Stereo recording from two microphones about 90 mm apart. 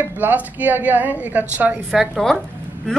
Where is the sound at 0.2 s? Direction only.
20° right (ahead or behind).